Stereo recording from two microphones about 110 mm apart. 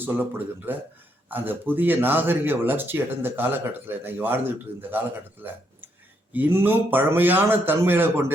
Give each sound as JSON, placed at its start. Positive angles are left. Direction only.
{"t": 0.0, "sound": "speech", "side_deg": -15}